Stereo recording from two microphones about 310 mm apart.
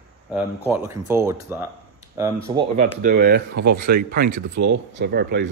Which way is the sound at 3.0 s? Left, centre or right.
Right.